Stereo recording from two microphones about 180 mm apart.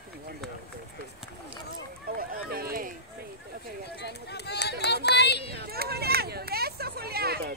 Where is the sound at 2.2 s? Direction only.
55° right (ahead or behind).